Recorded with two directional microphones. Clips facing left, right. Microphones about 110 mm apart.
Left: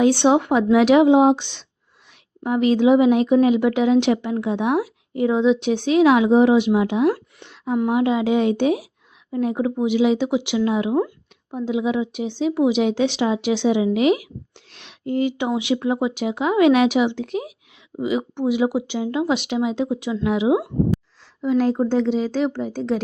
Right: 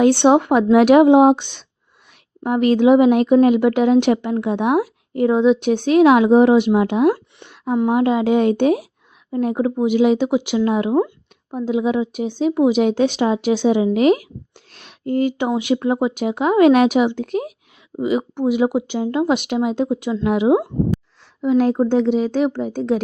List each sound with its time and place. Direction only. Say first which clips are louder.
0.0 s speech: right 3 dB; 55° right (ahead or behind)
7.4 s a sound: right 2 dB; 50° right (ahead or behind)
7.9 s speech: right 3 dB; 50° right (ahead or behind)
21.8 s speech: right 3 dB; 55° right (ahead or behind)